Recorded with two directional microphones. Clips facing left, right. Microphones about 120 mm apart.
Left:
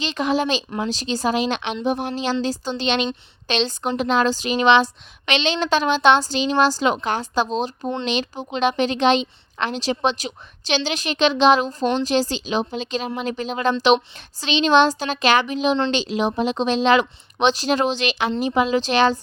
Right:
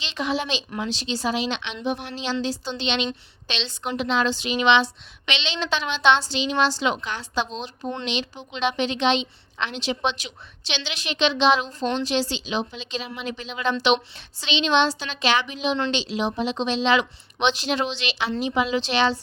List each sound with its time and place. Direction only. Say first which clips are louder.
0.0 s speech: left 5 dB; 45° left (ahead or behind)